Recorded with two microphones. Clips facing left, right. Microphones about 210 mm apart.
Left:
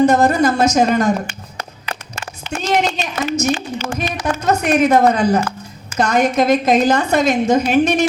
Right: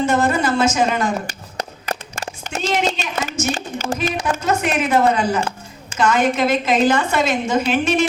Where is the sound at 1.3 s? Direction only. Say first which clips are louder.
Right 3 dB; 40° right (ahead or behind).